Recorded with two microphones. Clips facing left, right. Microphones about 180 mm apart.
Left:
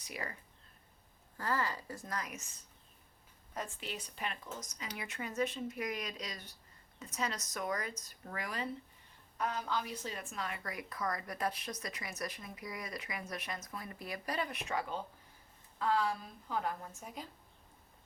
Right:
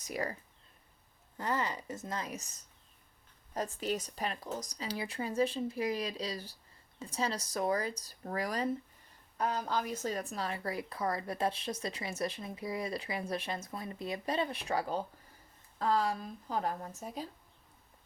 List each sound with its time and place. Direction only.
0.0 s speech: 40° right (ahead or behind)
1.4 s a woman's voice: 20° right (ahead or behind); by 17.2 s 35° right (ahead or behind)